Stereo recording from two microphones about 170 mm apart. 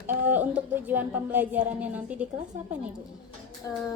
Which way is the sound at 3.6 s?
20° left (ahead or behind).